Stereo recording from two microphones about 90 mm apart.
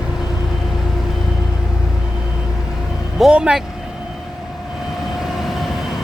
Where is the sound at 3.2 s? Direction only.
10° right (ahead or behind).